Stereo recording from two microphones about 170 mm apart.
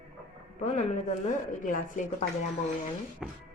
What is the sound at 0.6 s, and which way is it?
A woman's voice, 40° left (ahead or behind).